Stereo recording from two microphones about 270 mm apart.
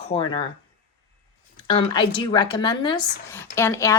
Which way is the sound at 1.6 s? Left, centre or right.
Centre.